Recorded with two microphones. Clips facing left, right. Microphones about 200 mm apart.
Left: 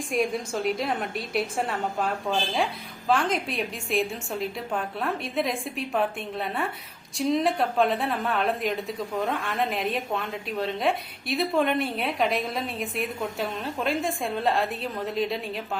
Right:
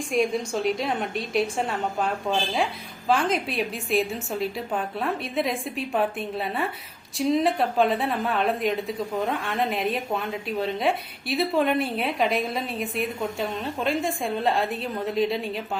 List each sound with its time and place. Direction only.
0.1 s a woman's voice: centre (ahead or behind)